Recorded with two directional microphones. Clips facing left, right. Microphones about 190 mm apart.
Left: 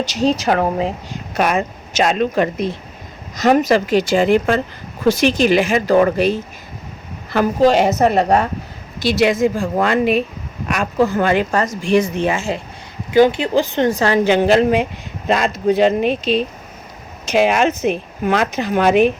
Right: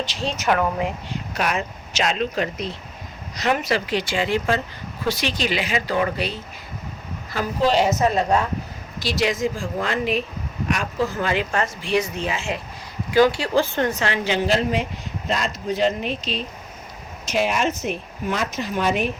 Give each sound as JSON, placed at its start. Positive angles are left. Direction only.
{"t": 0.0, "sound": "speech", "side_deg": 40}
{"t": 1.4, "sound": "speech", "side_deg": 50}
{"t": 7.6, "sound": "speech", "side_deg": 50}
{"t": 11.5, "sound": "speech", "side_deg": 40}
{"t": 13.1, "sound": "speech", "side_deg": 20}
{"t": 14.0, "sound": "speech", "side_deg": 45}
{"t": 17.3, "sound": "a woman's voice", "side_deg": 90}